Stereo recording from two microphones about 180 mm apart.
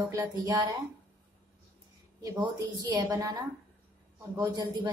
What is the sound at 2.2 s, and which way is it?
Speech, 20° right (ahead or behind).